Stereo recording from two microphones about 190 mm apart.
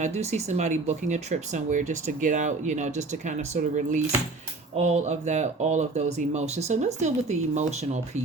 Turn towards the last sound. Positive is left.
turn(degrees=-35)  # may be behind; listen again after turning